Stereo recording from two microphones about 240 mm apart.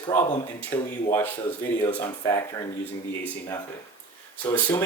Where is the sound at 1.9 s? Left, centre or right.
Centre.